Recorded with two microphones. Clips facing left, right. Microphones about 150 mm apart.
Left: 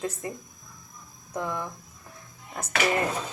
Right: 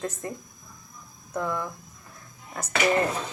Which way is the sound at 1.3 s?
20° left (ahead or behind).